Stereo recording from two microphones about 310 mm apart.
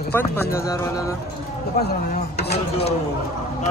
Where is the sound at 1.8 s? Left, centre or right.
Left.